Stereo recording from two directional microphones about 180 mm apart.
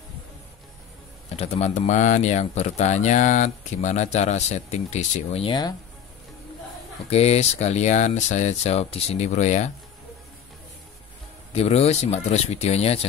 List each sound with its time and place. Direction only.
1.3 s speech: 35° left (ahead or behind)
7.1 s speech: 35° left (ahead or behind)
11.5 s speech: 35° left (ahead or behind)